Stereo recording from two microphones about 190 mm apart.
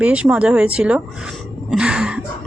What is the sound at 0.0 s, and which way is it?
Speech, 5° right (ahead or behind).